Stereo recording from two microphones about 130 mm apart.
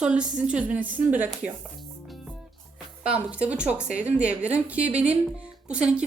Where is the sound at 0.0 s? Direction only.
10° right (ahead or behind).